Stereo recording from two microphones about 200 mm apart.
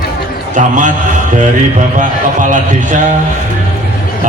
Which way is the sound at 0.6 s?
40° right (ahead or behind).